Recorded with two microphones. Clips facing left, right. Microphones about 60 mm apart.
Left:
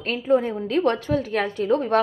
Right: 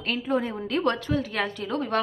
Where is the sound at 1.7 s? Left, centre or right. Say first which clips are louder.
Left 7 dB; left.